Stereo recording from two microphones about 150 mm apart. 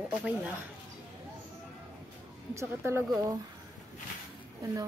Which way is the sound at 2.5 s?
15° right (ahead or behind).